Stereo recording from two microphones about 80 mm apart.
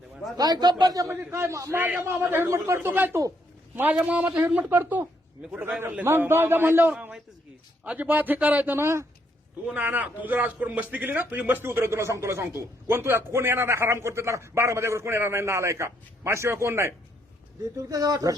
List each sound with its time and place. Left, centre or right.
0.3 s a man's voice: right
1.1 s a man's voice: right
1.7 s a man's voice: right
3.9 s a man's voice: centre
5.4 s a man's voice: centre
6.1 s speech: right
9.7 s a man's voice: right
17.7 s speech: right